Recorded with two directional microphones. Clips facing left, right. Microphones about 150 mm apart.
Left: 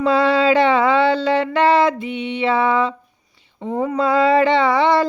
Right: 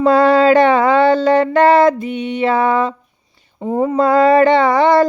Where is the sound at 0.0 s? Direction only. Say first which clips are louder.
Right 5 dB; 45° right (ahead or behind).